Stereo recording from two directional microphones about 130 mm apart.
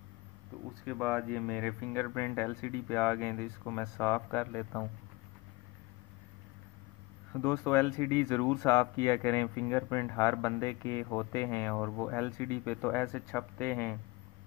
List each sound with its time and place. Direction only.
0.8 s speech: 5° left (ahead or behind)
7.4 s speech: 25° left (ahead or behind)